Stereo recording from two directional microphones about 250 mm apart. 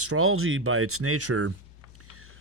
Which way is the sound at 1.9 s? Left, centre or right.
Right.